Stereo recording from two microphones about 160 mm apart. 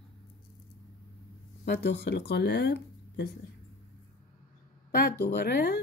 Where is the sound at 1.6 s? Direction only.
90° left.